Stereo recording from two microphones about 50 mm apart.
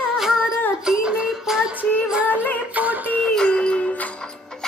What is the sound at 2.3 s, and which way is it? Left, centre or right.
Music, right.